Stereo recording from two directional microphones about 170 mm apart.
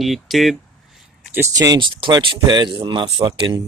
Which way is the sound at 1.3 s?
15° right (ahead or behind).